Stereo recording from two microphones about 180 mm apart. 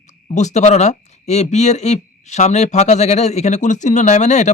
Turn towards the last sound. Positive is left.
turn(degrees=40)  # may be behind; listen again after turning